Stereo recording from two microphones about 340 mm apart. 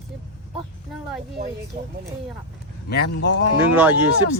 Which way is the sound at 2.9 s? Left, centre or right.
Left.